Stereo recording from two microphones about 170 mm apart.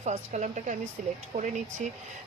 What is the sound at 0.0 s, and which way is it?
A woman's voice, 40° right (ahead or behind).